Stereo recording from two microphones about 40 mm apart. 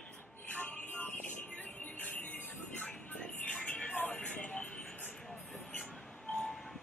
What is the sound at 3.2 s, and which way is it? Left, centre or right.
Music, left.